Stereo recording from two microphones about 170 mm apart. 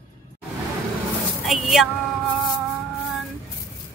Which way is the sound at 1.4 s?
Centre (ahead or behind).